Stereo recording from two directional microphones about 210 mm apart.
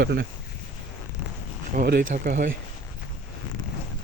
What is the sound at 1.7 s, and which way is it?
Speech, 40° right (ahead or behind).